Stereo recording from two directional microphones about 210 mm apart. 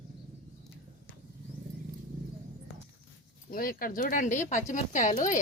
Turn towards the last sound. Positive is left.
turn(degrees=35)  # may be behind; listen again after turning